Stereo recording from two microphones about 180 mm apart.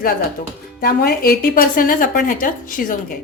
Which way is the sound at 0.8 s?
55° left (ahead or behind).